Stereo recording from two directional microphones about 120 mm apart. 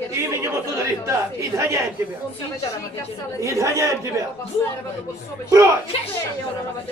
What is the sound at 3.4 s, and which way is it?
Speech, 25° right (ahead or behind).